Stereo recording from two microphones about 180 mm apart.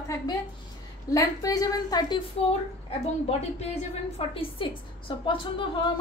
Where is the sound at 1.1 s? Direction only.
20° left (ahead or behind).